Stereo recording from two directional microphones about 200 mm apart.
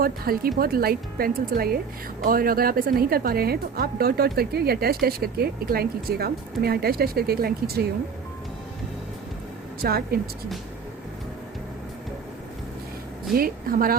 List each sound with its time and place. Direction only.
0.0 s a woman's voice: 50° right (ahead or behind)
9.8 s a woman's voice: 50° right (ahead or behind)
13.3 s a woman's voice: 45° right (ahead or behind)